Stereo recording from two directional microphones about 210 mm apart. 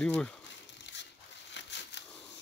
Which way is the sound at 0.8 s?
55° left (ahead or behind).